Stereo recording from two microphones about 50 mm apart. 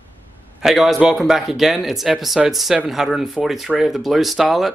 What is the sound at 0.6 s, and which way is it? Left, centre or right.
Speech, centre.